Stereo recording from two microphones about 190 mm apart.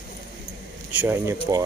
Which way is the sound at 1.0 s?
10° right (ahead or behind).